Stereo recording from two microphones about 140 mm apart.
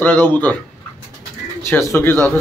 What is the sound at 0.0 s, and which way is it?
Speech, 15° left (ahead or behind).